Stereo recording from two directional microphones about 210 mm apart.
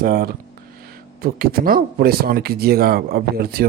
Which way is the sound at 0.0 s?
45° right (ahead or behind).